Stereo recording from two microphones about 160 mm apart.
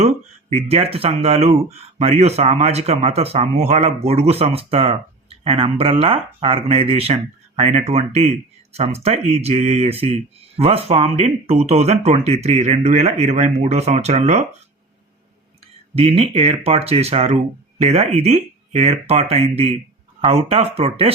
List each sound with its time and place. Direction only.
0.5 s speech: 40° right (ahead or behind)
16.0 s speech: 40° right (ahead or behind)